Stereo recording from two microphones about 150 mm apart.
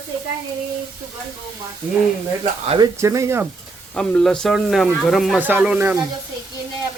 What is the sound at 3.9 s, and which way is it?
Speech, 5° left (ahead or behind).